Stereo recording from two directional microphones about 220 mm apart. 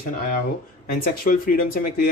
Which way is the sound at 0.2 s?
40° left (ahead or behind).